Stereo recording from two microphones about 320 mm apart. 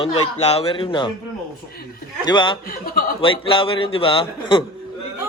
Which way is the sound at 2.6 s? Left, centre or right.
Left.